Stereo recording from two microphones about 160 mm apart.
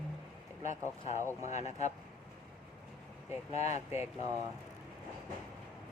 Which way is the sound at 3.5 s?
45° left (ahead or behind).